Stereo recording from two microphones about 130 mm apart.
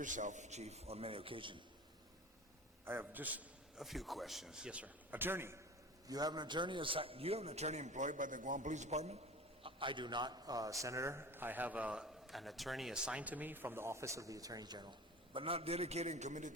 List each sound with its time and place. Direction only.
0.0 s a man's voice: 75° right (ahead or behind); by 1.6 s 40° right (ahead or behind)
2.8 s a man's voice: 15° right (ahead or behind)
3.8 s a man's voice: centre (ahead or behind); by 5.5 s 20° right (ahead or behind)
6.1 s a man's voice: 30° right (ahead or behind); by 9.1 s 60° right (ahead or behind)
9.6 s a man's voice: 40° right (ahead or behind); by 16.5 s 65° right (ahead or behind)